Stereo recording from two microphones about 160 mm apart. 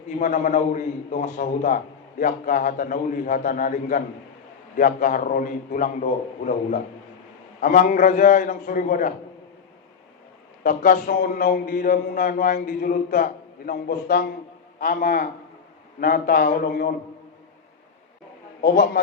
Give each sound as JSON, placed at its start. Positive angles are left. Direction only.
{"t": 0.2, "sound": "a man's voice", "side_deg": 50}
{"t": 10.6, "sound": "a man's voice", "side_deg": 60}
{"t": 18.6, "sound": "a man's voice", "side_deg": 75}